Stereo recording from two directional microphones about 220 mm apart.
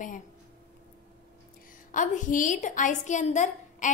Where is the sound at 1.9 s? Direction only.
35° left (ahead or behind).